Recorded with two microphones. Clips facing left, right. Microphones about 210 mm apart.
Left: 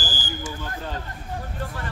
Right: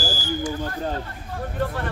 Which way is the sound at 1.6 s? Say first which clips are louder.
Right 11 dB; 55° right (ahead or behind).